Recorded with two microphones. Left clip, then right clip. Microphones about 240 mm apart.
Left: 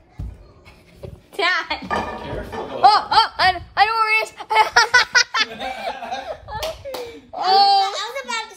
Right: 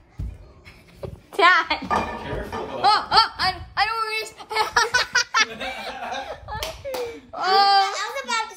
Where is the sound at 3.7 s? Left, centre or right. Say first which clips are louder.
Left 6 dB; left.